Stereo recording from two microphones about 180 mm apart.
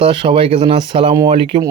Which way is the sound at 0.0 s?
30° right (ahead or behind).